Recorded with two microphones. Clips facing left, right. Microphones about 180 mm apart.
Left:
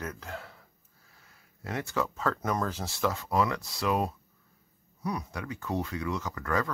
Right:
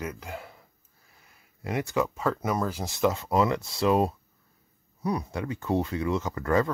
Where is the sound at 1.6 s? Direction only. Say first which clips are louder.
Right 4 dB; 15° right (ahead or behind).